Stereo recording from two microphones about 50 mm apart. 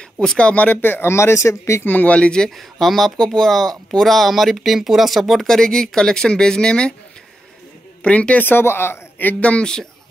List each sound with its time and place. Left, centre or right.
0.6 s speech: left
1.1 s speech: left
1.9 s speech: left
2.1 s speech: centre
2.5 s speech: centre
8.0 s speech: left
8.5 s speech: left
9.4 s speech: left